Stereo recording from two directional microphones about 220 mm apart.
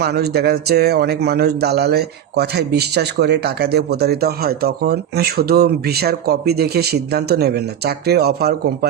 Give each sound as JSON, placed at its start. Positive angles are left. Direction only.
{"t": 0.0, "sound": "speech", "side_deg": -45}